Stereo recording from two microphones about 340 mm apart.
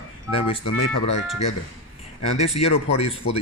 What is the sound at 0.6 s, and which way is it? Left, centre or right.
Speech, left.